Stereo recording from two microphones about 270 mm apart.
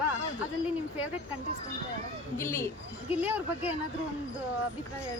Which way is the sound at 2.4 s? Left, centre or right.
Centre.